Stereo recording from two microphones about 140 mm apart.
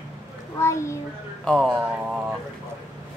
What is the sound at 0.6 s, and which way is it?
Speech, 20° left (ahead or behind).